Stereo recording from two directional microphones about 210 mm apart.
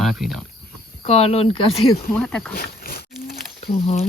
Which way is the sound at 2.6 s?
45° left (ahead or behind).